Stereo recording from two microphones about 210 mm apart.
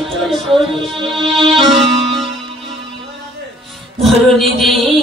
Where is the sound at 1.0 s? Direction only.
25° right (ahead or behind).